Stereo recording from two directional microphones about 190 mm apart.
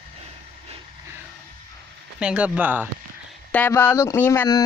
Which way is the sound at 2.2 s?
5° right (ahead or behind).